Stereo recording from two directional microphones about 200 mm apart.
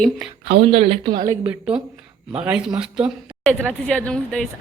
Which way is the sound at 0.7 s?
30° right (ahead or behind).